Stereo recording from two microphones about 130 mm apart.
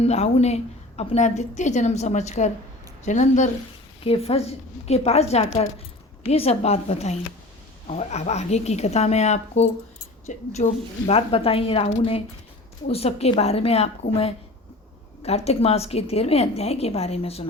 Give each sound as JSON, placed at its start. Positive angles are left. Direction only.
{"t": 0.0, "sound": "a woman's voice", "side_deg": 55}
{"t": 4.0, "sound": "a woman's voice", "side_deg": 50}